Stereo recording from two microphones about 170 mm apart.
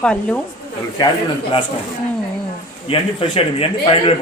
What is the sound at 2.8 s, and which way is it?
A man's voice, 35° left (ahead or behind).